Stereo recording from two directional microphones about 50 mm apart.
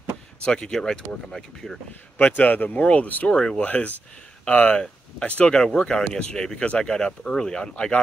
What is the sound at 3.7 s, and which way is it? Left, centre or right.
Speech, left.